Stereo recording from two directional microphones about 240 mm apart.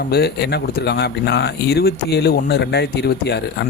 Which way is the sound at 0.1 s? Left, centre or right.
Left.